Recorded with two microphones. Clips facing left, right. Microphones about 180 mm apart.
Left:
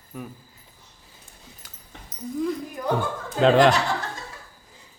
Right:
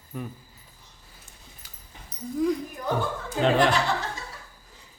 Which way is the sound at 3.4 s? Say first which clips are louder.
Left 5 dB; 90° left.